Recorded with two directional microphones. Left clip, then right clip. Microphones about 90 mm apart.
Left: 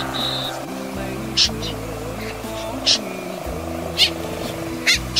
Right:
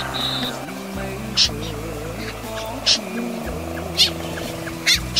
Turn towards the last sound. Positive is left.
turn(degrees=-30)  # may be behind; listen again after turning